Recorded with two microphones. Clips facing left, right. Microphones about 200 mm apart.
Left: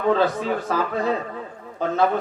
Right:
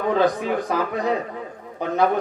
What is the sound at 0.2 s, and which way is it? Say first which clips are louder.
A man's voice: right 2 dB; 15° right (ahead or behind).